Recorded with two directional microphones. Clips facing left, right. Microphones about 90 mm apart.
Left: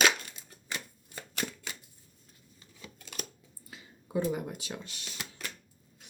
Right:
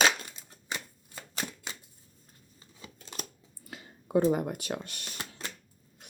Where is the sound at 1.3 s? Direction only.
25° right (ahead or behind).